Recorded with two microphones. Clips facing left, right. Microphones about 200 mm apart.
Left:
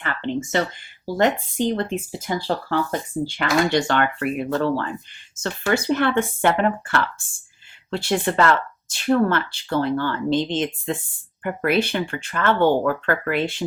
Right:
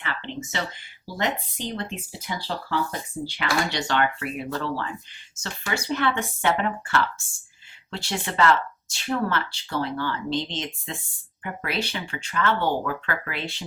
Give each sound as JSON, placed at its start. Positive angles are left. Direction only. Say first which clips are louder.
{"t": 0.0, "sound": "speech", "louder": "left 7 dB", "side_deg": 50}